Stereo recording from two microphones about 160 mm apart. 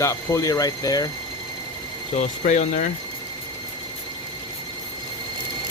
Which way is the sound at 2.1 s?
55° left (ahead or behind).